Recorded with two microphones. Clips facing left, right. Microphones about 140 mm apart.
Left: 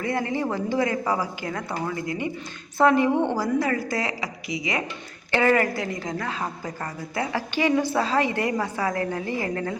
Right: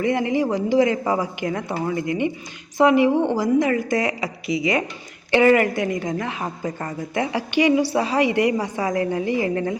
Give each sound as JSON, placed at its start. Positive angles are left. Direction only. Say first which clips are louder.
{"t": 0.0, "sound": "a woman's voice", "louder": "right 5 dB", "side_deg": -20}